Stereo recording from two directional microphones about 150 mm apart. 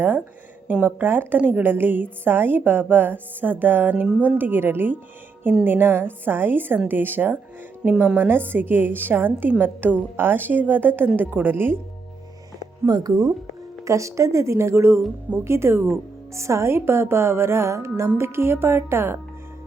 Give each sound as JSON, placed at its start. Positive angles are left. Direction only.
{"t": 0.7, "sound": "a woman's voice", "side_deg": -10}
{"t": 12.8, "sound": "a woman's voice", "side_deg": -25}